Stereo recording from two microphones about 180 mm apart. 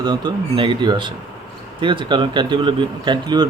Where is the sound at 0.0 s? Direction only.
25° right (ahead or behind).